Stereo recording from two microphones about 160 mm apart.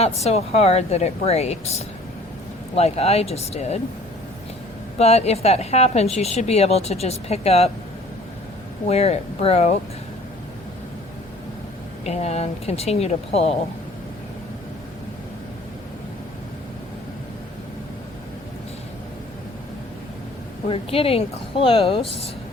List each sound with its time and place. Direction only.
0.0 s a woman's voice: 40° left (ahead or behind)
4.9 s a woman's voice: 40° left (ahead or behind)
8.9 s a woman's voice: 40° left (ahead or behind)
12.0 s a woman's voice: 40° left (ahead or behind)
20.7 s a woman's voice: 35° left (ahead or behind)